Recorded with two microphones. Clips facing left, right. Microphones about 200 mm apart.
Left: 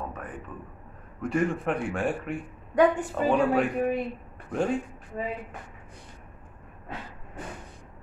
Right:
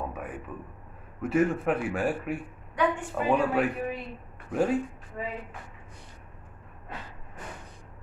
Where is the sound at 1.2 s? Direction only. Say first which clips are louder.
Right 2 dB; 5° right (ahead or behind).